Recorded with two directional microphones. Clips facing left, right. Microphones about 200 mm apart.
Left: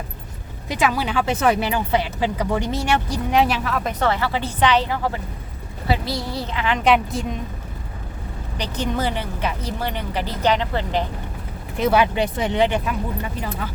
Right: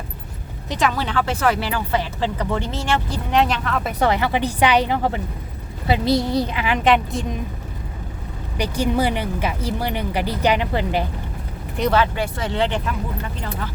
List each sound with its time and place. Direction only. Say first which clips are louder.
0.7 s speech: even; 10° left (ahead or behind)
4.0 s speech: right 4 dB; 15° right (ahead or behind)
6.8 s a woman's voice: even; centre (ahead or behind)
8.5 s speech: right 4 dB; 10° right (ahead or behind)
11.8 s speech: left 1 dB; 10° left (ahead or behind)
12.1 s speech: left 3 dB; 20° left (ahead or behind)